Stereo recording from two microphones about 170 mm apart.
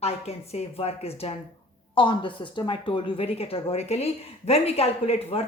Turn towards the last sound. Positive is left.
turn(degrees=35)  # may be behind; listen again after turning